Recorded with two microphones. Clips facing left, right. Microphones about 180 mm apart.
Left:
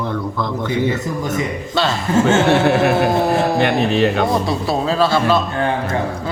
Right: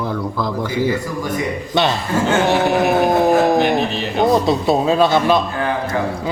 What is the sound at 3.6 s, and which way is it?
Speech, 65° left (ahead or behind).